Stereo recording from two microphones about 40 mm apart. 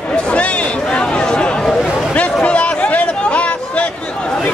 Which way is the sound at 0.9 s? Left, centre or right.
Left.